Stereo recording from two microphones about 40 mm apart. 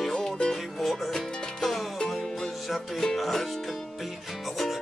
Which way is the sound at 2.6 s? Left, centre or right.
Centre.